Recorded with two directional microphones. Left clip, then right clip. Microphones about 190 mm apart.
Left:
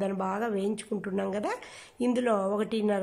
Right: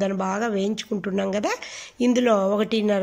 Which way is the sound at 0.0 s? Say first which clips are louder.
Right 6 dB; centre (ahead or behind).